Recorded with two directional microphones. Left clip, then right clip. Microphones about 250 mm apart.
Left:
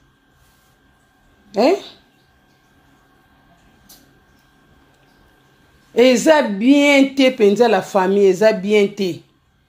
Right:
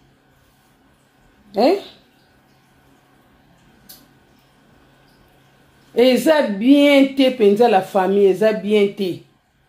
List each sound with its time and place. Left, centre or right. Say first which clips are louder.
1.5 s speech: left 1 dB; left
5.9 s speech: left 2 dB; left